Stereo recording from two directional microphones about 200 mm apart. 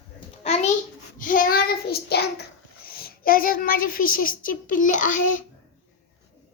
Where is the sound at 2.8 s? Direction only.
50° left (ahead or behind).